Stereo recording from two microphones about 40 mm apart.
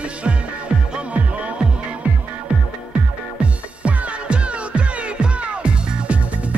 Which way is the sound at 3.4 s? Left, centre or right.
Right.